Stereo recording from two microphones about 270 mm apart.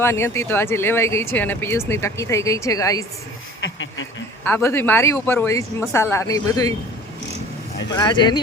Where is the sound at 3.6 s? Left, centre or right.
Left.